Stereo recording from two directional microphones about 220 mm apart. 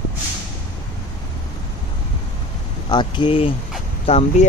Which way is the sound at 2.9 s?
20° left (ahead or behind).